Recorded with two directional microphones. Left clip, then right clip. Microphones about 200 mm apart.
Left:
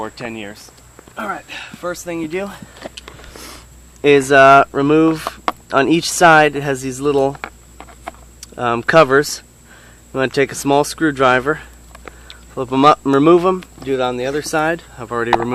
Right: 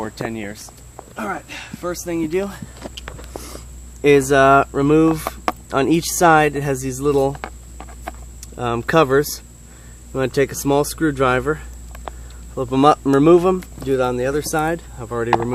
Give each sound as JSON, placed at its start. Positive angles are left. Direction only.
{"t": 0.0, "sound": "speech", "side_deg": 15}
{"t": 4.0, "sound": "speech", "side_deg": 25}
{"t": 7.3, "sound": "a sound", "side_deg": 5}
{"t": 8.4, "sound": "speech", "side_deg": 30}